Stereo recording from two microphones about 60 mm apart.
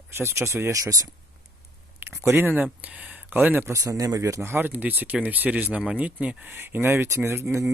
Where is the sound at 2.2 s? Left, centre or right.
Right.